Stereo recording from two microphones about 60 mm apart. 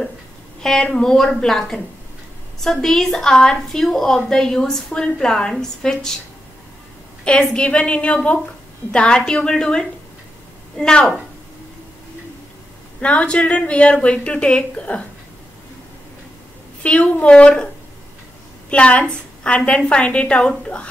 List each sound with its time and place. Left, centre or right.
0.6 s a woman's voice: centre
7.2 s a woman's voice: centre
13.0 s a woman's voice: centre
16.8 s a woman's voice: left
18.7 s a woman's voice: left